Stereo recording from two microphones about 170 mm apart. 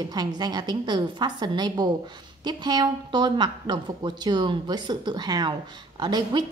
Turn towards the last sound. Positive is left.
turn(degrees=-25)  # may be behind; listen again after turning